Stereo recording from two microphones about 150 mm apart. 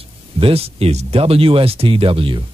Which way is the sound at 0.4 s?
40° right (ahead or behind).